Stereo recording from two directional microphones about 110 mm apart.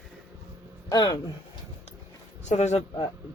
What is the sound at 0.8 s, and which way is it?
Speech, 35° left (ahead or behind).